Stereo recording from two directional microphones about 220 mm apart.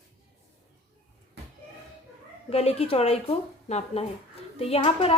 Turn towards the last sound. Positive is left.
turn(degrees=25)  # may be behind; listen again after turning